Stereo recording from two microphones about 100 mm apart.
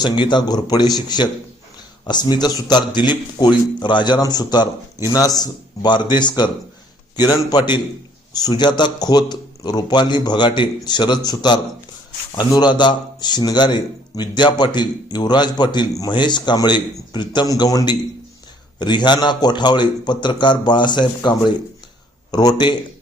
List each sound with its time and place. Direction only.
0.0 s a man's voice: 50° left (ahead or behind)